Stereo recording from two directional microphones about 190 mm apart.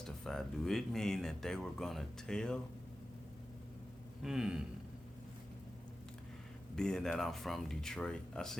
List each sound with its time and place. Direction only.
0.3 s speech: centre (ahead or behind)
4.2 s speech: 5° right (ahead or behind)
6.7 s speech: 5° left (ahead or behind)